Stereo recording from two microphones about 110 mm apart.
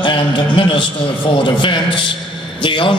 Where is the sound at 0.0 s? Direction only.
50° left (ahead or behind).